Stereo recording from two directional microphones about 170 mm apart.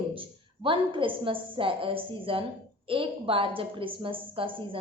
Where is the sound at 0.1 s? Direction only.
30° right (ahead or behind).